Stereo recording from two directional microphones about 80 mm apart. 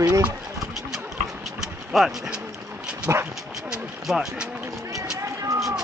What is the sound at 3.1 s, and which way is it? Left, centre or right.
Speech, right.